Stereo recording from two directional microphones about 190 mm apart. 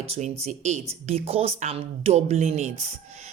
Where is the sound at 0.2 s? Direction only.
40° right (ahead or behind).